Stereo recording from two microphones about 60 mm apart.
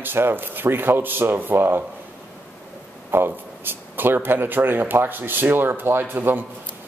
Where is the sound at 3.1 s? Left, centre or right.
Right.